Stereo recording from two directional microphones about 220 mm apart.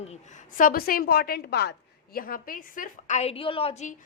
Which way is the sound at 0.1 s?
35° left (ahead or behind).